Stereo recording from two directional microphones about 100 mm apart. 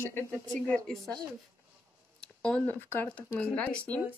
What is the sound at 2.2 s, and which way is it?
Speech, 10° left (ahead or behind).